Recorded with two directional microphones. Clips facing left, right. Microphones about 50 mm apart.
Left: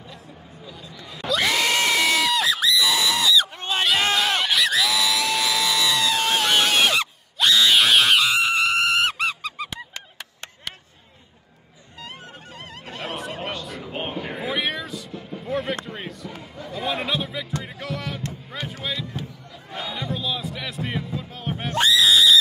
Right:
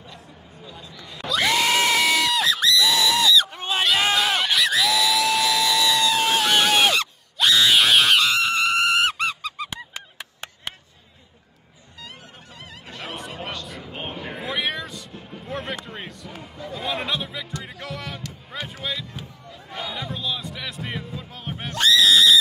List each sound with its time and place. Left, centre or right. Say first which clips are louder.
1.0 s screaming: even; centre
9.9 s chop: right 1 dB; centre
12.0 s honk: left 3 dB; left
13.0 s a sound: left 3 dB; centre
14.4 s vehicle: even; centre
15.8 s a sound: left 2 dB; centre
17.6 s music: left 2 dB; centre
21.9 s screaming: right 1 dB; centre